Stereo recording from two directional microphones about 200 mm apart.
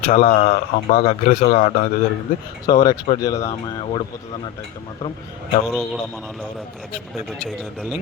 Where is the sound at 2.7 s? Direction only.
20° left (ahead or behind).